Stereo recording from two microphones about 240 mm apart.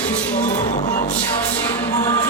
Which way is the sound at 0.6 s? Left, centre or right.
Left.